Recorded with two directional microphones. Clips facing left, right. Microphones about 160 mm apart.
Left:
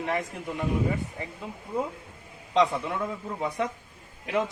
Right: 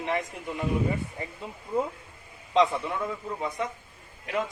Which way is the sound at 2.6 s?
Centre (ahead or behind).